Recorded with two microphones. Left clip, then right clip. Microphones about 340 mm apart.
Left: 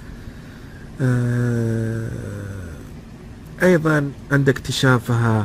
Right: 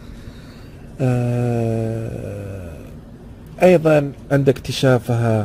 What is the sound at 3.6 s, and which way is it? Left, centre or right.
Speech, right.